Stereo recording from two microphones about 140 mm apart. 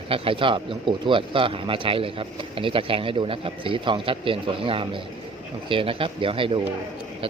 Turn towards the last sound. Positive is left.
turn(degrees=-40)  # may be behind; listen again after turning